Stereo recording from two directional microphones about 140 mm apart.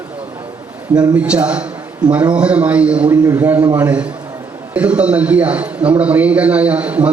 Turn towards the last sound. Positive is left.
turn(degrees=-10)  # may be behind; listen again after turning